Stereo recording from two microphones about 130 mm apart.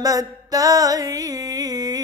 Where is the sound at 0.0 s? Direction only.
25° right (ahead or behind).